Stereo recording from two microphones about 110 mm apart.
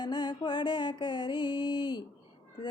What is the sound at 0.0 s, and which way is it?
Music, 40° left (ahead or behind).